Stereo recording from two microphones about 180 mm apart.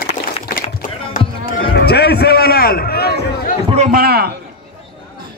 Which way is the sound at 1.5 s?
55° left (ahead or behind).